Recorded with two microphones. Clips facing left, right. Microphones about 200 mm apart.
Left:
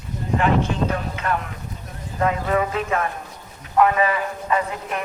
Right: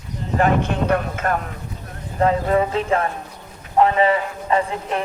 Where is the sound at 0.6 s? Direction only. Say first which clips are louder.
Right 3 dB; 60° right (ahead or behind).